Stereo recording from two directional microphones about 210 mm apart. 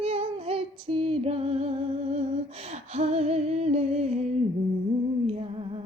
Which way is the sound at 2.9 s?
30° right (ahead or behind).